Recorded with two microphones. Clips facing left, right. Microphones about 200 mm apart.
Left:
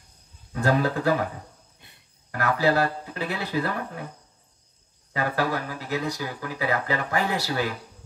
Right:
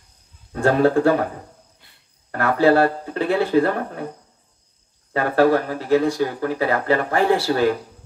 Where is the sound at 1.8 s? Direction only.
20° left (ahead or behind).